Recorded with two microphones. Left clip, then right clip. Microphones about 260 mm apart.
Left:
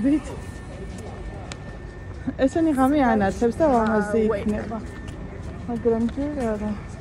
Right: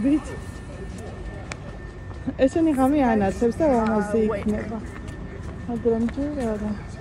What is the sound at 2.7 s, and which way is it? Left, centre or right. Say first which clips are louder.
Speech: left 1 dB; centre.